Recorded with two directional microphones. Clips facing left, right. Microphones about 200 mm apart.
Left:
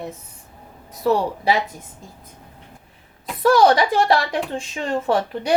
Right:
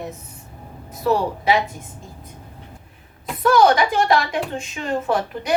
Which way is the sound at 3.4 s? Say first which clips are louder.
Left 1 dB; 30° left (ahead or behind).